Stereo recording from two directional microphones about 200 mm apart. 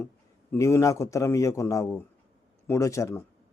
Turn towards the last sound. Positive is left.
turn(degrees=15)  # may be behind; listen again after turning